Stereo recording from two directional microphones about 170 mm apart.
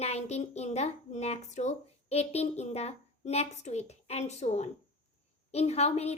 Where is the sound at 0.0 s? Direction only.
40° left (ahead or behind).